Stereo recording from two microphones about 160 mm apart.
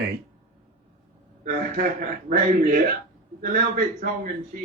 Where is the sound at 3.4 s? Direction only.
55° right (ahead or behind).